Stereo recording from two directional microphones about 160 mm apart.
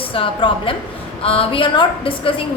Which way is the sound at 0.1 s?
35° left (ahead or behind).